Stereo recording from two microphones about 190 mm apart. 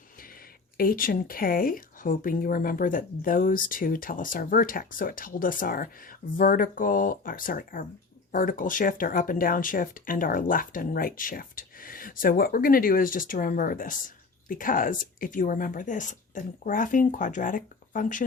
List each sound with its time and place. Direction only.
0.8 s speech: 50° left (ahead or behind)